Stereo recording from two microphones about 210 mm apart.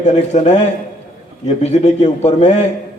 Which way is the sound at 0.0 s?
35° left (ahead or behind).